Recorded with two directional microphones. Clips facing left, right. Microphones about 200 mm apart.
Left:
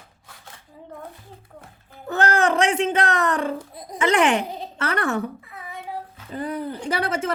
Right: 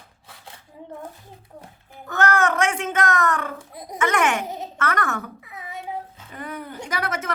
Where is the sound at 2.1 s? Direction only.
35° left (ahead or behind).